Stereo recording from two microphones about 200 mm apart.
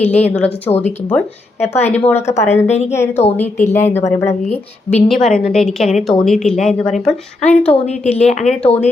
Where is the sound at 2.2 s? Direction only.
35° left (ahead or behind).